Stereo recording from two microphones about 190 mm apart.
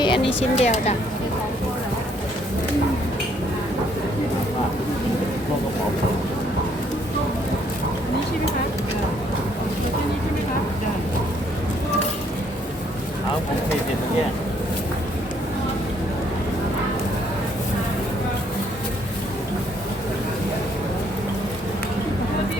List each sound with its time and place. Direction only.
0.0 s a woman's voice: 25° left (ahead or behind)